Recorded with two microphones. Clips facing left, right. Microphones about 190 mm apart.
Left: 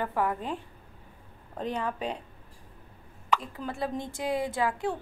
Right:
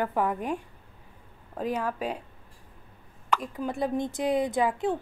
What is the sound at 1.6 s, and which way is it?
Speech, 10° right (ahead or behind).